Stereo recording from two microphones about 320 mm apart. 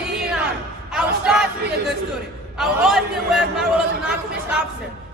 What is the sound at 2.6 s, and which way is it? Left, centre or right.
A man's voice, centre.